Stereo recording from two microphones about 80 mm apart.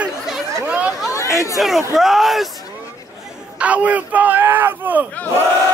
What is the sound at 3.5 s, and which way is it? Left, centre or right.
Speech, centre.